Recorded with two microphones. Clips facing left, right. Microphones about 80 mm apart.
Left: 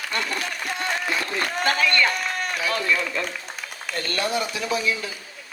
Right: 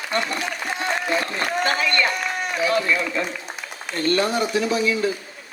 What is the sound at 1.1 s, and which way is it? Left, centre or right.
A man's voice, right.